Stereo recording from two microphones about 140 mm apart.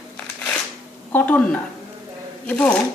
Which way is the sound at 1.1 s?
10° left (ahead or behind).